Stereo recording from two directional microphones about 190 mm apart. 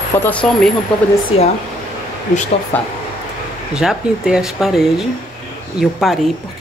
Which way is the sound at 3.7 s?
5° right (ahead or behind).